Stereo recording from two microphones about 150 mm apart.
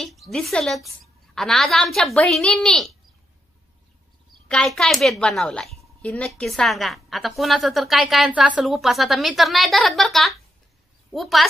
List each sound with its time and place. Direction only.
0.0 s a woman's voice: centre (ahead or behind)
4.5 s a woman's voice: 5° left (ahead or behind)